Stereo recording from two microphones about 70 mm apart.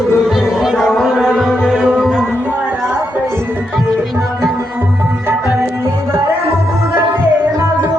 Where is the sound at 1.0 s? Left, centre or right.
Centre.